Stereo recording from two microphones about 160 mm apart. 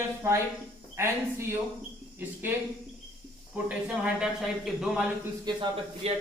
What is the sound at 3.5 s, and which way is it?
A man's voice, 10° right (ahead or behind).